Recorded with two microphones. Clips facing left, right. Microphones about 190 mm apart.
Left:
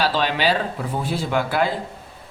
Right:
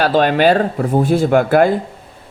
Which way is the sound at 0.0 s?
50° right (ahead or behind).